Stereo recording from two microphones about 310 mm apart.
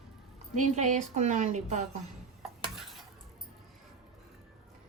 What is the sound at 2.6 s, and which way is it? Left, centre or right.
Stir, centre.